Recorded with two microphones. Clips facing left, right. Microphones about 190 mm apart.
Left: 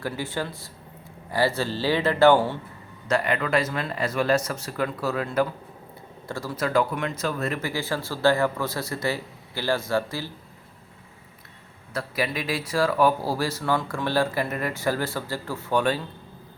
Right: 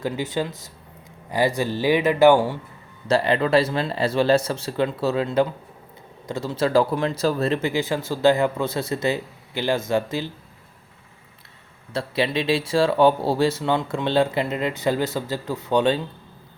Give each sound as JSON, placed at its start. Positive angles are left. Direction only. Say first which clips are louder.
{"t": 0.0, "sound": "speech", "louder": "right 4 dB", "side_deg": -20}
{"t": 3.1, "sound": "speech", "louder": "right 5 dB", "side_deg": -30}
{"t": 11.9, "sound": "speech", "louder": "right 5 dB", "side_deg": -25}